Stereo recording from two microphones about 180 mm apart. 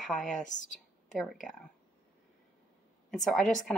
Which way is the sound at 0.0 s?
Centre (ahead or behind).